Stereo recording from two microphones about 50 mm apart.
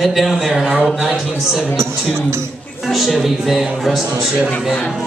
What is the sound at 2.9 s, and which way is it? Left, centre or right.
Speech, centre.